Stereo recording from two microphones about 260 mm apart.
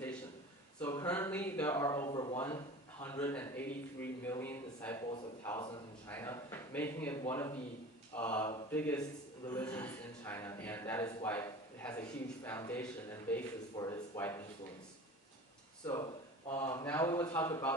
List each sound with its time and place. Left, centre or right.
0.7 s a man's voice: centre
15.8 s a man's voice: centre